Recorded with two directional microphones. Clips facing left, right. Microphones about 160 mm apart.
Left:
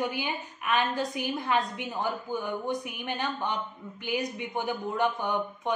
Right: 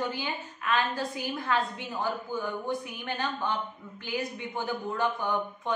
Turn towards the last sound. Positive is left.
turn(degrees=20)  # may be behind; listen again after turning